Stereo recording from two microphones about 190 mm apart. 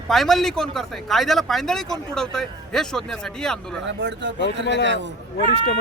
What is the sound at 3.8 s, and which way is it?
Speech, 70° right (ahead or behind).